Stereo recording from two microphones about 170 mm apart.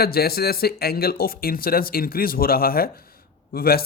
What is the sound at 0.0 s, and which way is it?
Speech, 65° left (ahead or behind).